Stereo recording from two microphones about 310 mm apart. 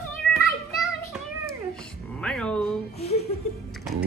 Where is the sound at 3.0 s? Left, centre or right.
Centre.